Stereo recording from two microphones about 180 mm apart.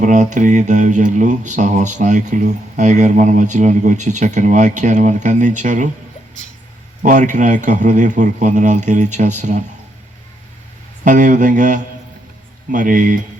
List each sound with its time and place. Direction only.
0.0 s speech: 45° right (ahead or behind)
7.0 s speech: 45° right (ahead or behind)
11.0 s speech: 45° right (ahead or behind)